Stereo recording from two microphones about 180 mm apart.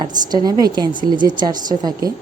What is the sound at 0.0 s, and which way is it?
A woman's voice, 20° right (ahead or behind).